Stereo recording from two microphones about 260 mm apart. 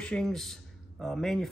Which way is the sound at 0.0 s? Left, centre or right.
Centre.